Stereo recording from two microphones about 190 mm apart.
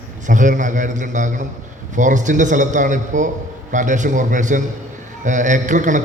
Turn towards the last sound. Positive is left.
turn(degrees=-40)  # may be behind; listen again after turning